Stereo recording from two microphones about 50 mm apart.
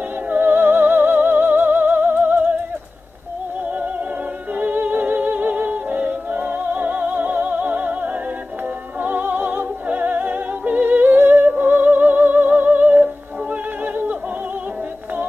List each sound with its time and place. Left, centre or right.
0.3 s music: right
4.6 s music: right
9.0 s opera: right